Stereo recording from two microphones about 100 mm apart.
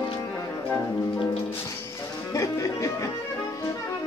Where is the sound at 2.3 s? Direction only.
35° left (ahead or behind).